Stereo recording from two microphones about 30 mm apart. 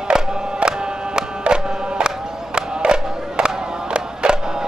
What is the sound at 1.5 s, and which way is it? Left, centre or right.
Crowd, right.